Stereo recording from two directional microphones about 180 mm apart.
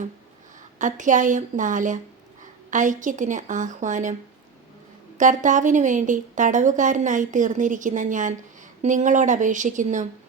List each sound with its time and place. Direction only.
0.8 s a woman's voice: 45° right (ahead or behind)